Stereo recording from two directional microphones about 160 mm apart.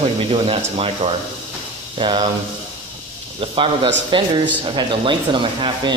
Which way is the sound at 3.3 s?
30° right (ahead or behind).